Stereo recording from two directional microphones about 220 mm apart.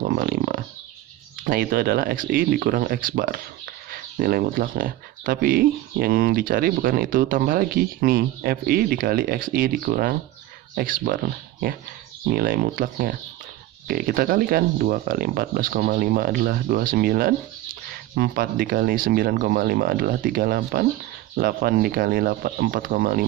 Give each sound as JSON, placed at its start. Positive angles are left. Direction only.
{"t": 0.0, "sound": "a sound", "side_deg": -45}
{"t": 1.4, "sound": "speech", "side_deg": -40}
{"t": 12.3, "sound": "speech", "side_deg": -40}